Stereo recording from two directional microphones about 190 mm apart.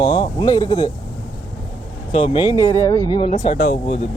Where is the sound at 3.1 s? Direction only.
30° left (ahead or behind).